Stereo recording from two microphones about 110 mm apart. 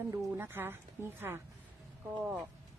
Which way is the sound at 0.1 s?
20° right (ahead or behind).